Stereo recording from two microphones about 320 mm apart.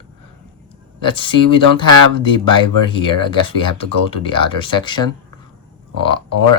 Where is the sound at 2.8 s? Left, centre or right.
Centre.